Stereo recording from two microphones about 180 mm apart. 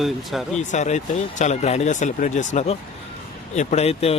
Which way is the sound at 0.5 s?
40° left (ahead or behind).